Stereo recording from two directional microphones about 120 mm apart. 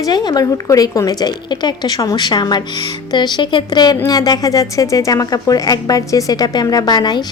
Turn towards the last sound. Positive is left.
turn(degrees=35)  # may be behind; listen again after turning